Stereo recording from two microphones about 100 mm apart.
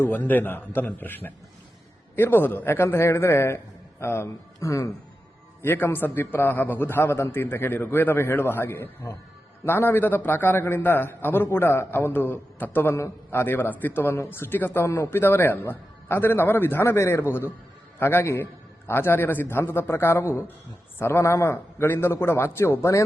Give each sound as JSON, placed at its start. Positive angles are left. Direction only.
{"t": 0.0, "sound": "a man's voice", "side_deg": 20}